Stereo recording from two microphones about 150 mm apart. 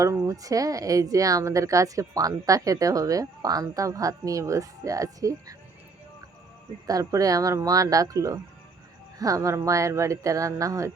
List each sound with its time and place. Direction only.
0.0 s speech: 20° right (ahead or behind)
6.8 s speech: 20° right (ahead or behind)